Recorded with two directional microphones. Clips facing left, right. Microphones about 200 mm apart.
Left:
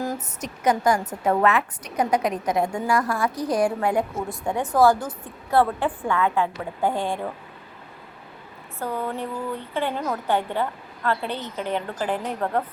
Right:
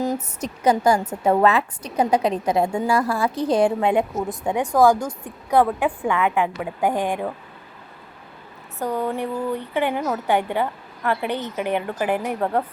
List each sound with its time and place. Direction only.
0.4 s a woman's voice: 30° right (ahead or behind)
8.8 s a woman's voice: 15° right (ahead or behind)